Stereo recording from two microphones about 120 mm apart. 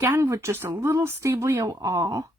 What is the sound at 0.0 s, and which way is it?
Speech, 20° right (ahead or behind).